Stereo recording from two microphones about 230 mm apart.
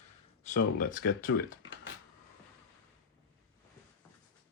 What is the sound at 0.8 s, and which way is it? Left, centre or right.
Speech, left.